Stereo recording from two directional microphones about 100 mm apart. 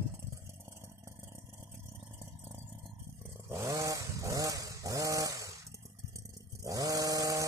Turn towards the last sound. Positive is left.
turn(degrees=-35)  # may be behind; listen again after turning